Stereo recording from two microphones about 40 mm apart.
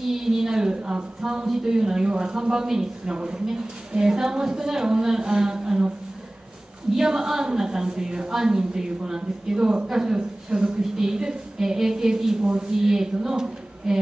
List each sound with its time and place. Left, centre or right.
0.1 s a sound: centre
1.5 s a woman's voice: centre
7.0 s a woman's voice: centre